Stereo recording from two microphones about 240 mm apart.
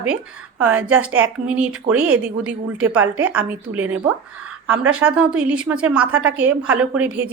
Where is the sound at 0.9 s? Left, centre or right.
Centre.